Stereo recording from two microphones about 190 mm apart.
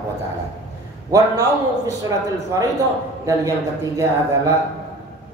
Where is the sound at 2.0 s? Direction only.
15° right (ahead or behind).